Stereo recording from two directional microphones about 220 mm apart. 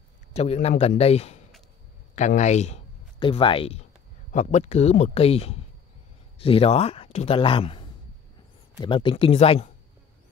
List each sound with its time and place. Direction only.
0.3 s speech: 30° left (ahead or behind)